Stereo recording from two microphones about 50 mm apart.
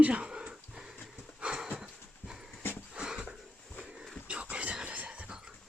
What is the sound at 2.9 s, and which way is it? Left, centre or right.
Wheeze, centre.